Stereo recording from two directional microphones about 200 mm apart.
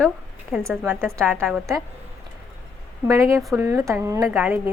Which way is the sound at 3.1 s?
15° right (ahead or behind).